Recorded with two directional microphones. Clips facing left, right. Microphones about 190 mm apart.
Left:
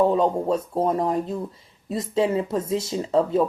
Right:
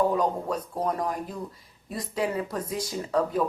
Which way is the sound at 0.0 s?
25° left (ahead or behind).